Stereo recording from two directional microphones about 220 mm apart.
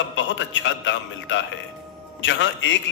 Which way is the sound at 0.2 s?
60° left (ahead or behind).